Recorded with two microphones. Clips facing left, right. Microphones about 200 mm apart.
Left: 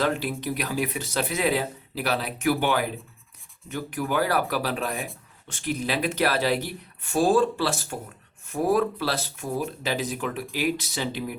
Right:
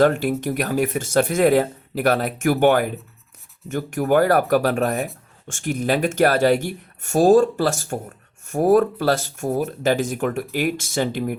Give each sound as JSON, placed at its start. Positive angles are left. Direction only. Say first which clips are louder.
{"t": 0.0, "sound": "speech", "louder": "right 8 dB", "side_deg": -50}